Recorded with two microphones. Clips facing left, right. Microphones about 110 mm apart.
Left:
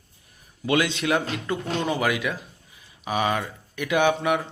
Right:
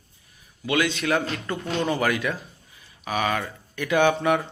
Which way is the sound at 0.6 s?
25° left (ahead or behind).